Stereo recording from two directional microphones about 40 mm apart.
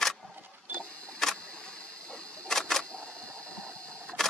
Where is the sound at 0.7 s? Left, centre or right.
Right.